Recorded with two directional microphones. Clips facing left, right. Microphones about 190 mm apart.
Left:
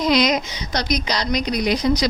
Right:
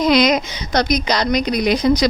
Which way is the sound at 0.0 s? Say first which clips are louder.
Right 4 dB; 60° right (ahead or behind).